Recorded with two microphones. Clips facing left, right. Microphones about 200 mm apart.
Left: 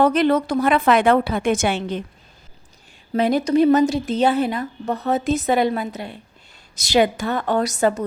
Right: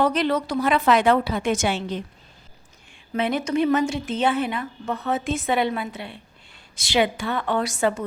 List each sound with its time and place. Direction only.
0.0 s a woman's voice: 50° left (ahead or behind)
3.1 s speech: 35° left (ahead or behind)